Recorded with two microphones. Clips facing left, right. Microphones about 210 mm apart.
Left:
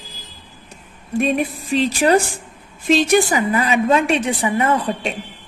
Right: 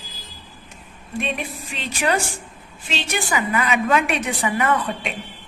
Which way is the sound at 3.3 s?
30° left (ahead or behind).